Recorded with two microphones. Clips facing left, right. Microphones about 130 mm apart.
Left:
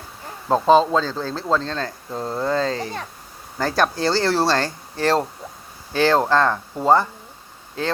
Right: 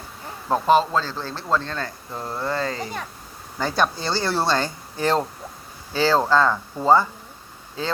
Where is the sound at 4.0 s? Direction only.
90° left.